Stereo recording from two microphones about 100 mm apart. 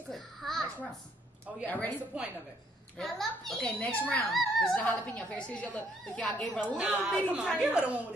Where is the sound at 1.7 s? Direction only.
20° left (ahead or behind).